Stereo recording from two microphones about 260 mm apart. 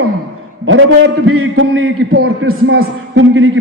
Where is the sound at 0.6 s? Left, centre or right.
Right.